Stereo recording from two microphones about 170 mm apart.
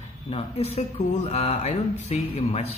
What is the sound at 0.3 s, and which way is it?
Speech, 40° left (ahead or behind).